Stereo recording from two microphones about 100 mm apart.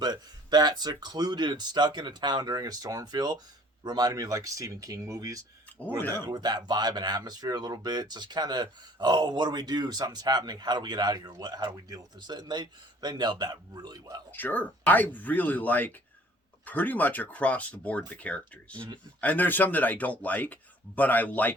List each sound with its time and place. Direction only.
0.0 s speech: 45° right (ahead or behind)
6.0 s speech: 20° left (ahead or behind)
6.2 s speech: 45° right (ahead or behind)
14.3 s speech: 20° left (ahead or behind)